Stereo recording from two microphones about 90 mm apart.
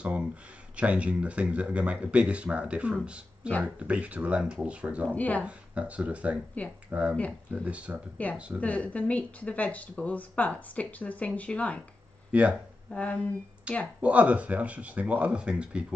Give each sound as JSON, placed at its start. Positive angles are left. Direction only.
{"t": 0.0, "sound": "a sound", "side_deg": -15}
{"t": 0.7, "sound": "speech", "side_deg": -15}
{"t": 5.1, "sound": "a woman's voice", "side_deg": 15}
{"t": 5.4, "sound": "speech", "side_deg": -15}
{"t": 8.5, "sound": "a woman's voice", "side_deg": 15}
{"t": 12.3, "sound": "speech", "side_deg": -15}
{"t": 12.9, "sound": "a woman's voice", "side_deg": 15}
{"t": 13.7, "sound": "speech", "side_deg": -15}